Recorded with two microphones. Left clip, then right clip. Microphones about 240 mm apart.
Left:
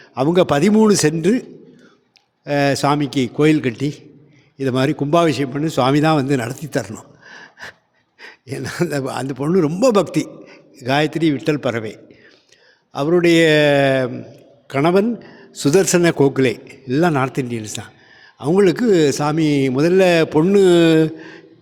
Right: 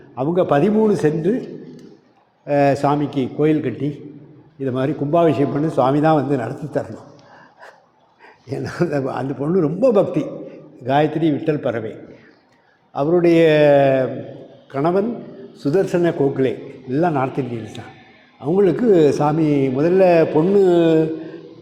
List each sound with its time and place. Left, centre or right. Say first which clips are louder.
0.1 s a man's voice: left 2 dB; left
2.4 s a man's voice: right 1 dB; left
8.2 s a man's voice: right 1 dB; left
14.7 s a man's voice: left 3 dB; left